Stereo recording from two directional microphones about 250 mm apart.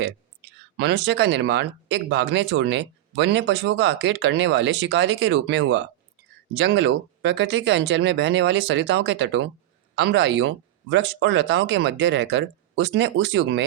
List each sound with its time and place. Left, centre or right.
0.8 s speech: right